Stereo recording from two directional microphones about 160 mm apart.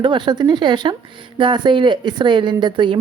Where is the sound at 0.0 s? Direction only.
30° right (ahead or behind).